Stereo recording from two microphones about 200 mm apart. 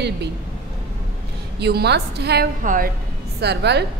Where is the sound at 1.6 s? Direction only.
55° right (ahead or behind).